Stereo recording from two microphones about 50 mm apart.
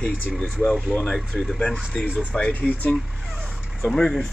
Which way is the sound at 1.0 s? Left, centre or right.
Centre.